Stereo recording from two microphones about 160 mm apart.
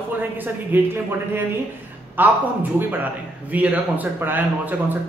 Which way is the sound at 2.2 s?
10° right (ahead or behind).